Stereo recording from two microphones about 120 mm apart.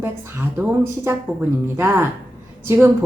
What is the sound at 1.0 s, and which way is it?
Speech, 20° right (ahead or behind).